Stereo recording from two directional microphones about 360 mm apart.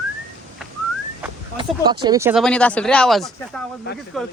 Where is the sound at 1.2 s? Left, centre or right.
Centre.